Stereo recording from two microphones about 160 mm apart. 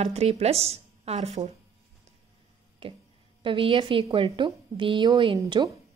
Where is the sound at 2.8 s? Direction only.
35° right (ahead or behind).